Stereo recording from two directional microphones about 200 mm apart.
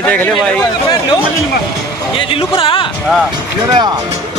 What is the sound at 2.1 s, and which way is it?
Speech, 25° left (ahead or behind).